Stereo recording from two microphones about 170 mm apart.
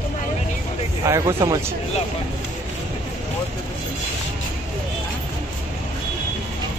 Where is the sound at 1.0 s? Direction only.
20° right (ahead or behind).